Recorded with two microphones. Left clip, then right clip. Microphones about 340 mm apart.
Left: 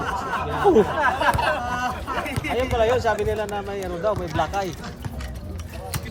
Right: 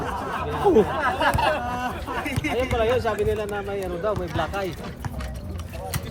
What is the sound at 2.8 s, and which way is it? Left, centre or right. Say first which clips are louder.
Speech: left 3 dB; left.